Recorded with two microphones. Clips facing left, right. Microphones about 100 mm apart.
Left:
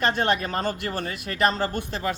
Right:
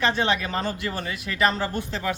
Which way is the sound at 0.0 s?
50° left (ahead or behind).